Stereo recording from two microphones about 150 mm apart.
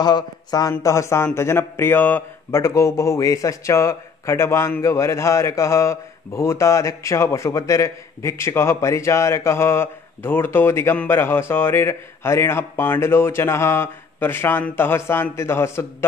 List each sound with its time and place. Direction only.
0.0 s speech: 25° left (ahead or behind)